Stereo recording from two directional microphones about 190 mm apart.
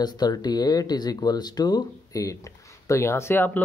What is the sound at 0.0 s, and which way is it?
Speech, 20° left (ahead or behind).